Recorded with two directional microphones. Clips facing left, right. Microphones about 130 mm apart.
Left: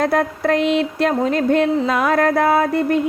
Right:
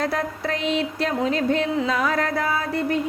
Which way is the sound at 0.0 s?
55° left (ahead or behind).